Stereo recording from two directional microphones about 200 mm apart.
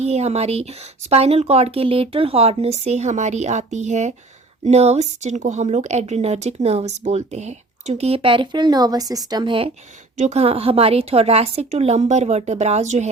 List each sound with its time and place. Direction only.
0.0 s speech: 30° right (ahead or behind)